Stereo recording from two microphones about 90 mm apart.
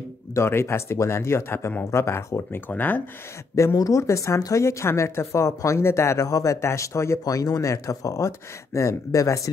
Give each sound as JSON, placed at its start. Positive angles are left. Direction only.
{"t": 0.3, "sound": "speech", "side_deg": 30}
{"t": 3.5, "sound": "speech", "side_deg": 35}